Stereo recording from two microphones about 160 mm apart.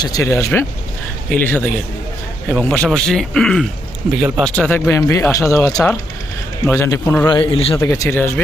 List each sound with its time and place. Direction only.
0.0 s a man's voice: 20° left (ahead or behind)
7.3 s a man's voice: 30° left (ahead or behind)
7.8 s speech: 20° left (ahead or behind)